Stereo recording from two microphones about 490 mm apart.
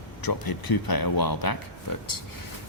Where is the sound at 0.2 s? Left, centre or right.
Left.